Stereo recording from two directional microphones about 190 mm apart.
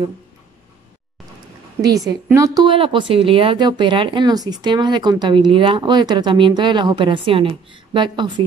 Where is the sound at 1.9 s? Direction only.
15° right (ahead or behind).